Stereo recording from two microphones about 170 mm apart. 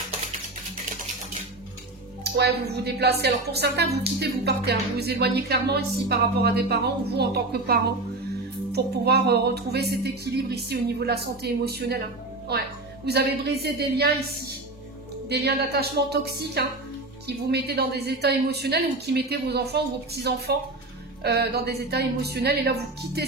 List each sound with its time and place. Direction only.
2.2 s a woman's voice: 70° right (ahead or behind)
15.2 s a woman's voice: 75° right (ahead or behind)